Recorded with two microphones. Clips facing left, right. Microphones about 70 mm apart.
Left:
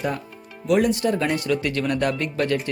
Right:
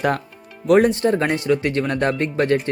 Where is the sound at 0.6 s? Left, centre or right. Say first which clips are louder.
Right 5 dB; right.